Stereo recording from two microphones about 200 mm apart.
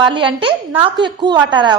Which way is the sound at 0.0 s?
25° right (ahead or behind).